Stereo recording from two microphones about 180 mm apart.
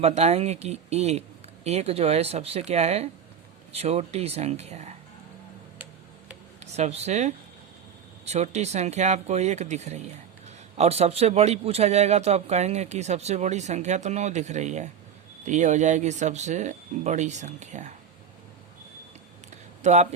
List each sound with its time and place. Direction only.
0.0 s a man's voice: 35° right (ahead or behind)
6.6 s a man's voice: 35° right (ahead or behind)
19.8 s a man's voice: 40° right (ahead or behind)